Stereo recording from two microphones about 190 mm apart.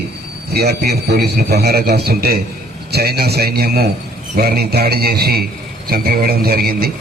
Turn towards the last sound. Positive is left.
turn(degrees=-50)  # may be behind; listen again after turning